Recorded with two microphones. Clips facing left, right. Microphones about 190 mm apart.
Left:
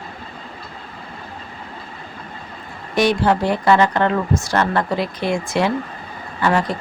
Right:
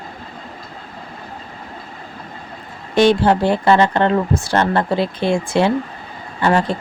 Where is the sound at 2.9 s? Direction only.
30° right (ahead or behind).